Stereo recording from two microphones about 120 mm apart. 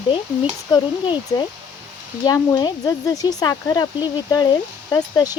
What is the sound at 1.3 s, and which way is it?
Speech, 30° left (ahead or behind).